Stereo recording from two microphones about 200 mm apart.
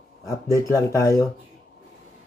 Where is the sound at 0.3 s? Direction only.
15° left (ahead or behind).